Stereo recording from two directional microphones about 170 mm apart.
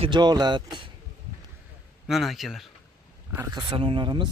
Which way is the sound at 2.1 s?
Centre (ahead or behind).